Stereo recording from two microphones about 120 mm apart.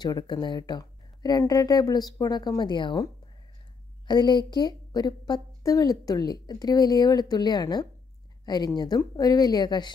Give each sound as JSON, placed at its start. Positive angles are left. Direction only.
{"t": 0.0, "sound": "a woman's voice", "side_deg": 35}
{"t": 4.1, "sound": "a woman's voice", "side_deg": 40}